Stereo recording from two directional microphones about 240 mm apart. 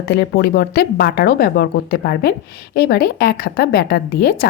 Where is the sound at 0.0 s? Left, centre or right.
Left.